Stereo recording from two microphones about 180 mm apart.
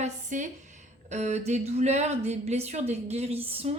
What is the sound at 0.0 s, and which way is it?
A woman's voice, 45° right (ahead or behind).